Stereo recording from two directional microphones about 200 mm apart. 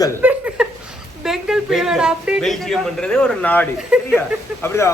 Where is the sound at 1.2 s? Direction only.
Centre (ahead or behind).